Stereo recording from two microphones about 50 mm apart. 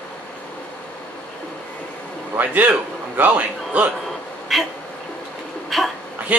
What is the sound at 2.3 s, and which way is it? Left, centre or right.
A man's voice, right.